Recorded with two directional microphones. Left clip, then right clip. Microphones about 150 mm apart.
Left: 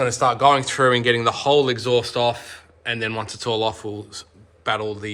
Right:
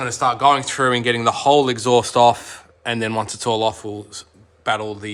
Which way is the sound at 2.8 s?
50° right (ahead or behind).